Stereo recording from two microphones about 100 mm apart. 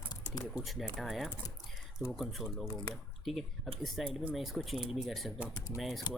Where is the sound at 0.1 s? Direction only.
45° left (ahead or behind).